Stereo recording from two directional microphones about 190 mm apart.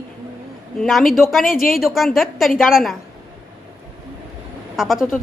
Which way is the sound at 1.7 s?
Centre (ahead or behind).